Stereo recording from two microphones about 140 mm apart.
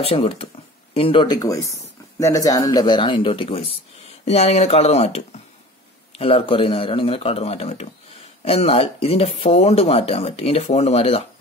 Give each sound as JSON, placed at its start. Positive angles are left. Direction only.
{"t": 0.0, "sound": "speech", "side_deg": 45}